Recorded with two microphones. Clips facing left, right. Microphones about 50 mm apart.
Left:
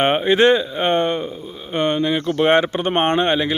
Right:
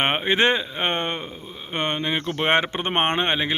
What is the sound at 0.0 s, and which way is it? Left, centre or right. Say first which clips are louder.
Speech: left 5 dB; right.